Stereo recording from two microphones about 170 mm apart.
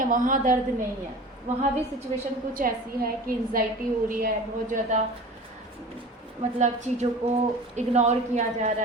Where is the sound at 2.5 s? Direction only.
55° right (ahead or behind).